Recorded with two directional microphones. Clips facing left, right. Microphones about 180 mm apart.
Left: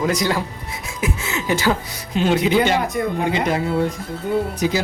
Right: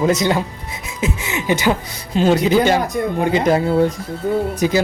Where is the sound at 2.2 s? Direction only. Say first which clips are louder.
Right 3 dB; 40° right (ahead or behind).